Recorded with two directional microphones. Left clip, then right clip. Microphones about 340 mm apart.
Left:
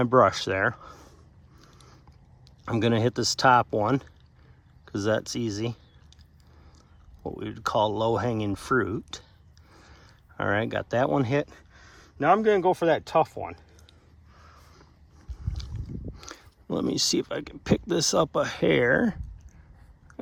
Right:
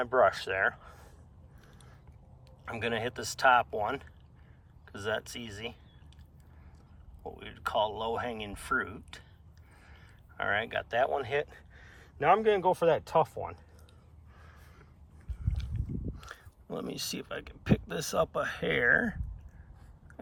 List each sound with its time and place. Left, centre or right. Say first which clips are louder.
0.0 s speech: left 5 dB; centre
1.6 s biting: left 5 dB; centre
2.6 s speech: left 8 dB; centre
7.3 s speech: left 5 dB; centre
14.5 s a sound: left 4 dB; centre
15.4 s speech: left 1 dB; centre